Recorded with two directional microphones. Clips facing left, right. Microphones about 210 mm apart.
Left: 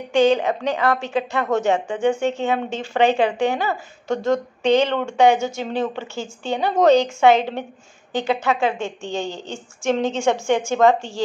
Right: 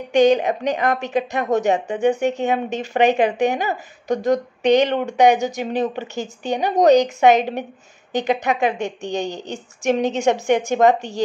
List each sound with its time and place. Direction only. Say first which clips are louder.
0.1 s a woman's voice: right 2 dB; 20° right (ahead or behind)